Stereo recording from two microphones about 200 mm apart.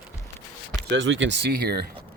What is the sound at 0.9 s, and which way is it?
Speech, 65° right (ahead or behind).